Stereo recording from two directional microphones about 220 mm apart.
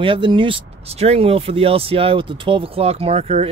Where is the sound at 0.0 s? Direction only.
25° right (ahead or behind).